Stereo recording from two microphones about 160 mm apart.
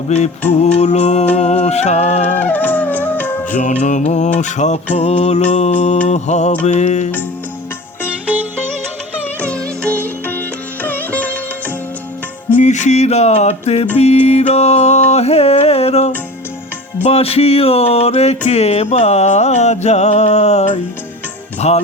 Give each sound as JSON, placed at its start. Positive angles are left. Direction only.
{"t": 0.1, "sound": "music", "side_deg": 45}
{"t": 2.4, "sound": "music", "side_deg": 10}
{"t": 3.5, "sound": "music", "side_deg": 50}
{"t": 10.8, "sound": "sitar", "side_deg": 10}
{"t": 12.5, "sound": "music", "side_deg": 50}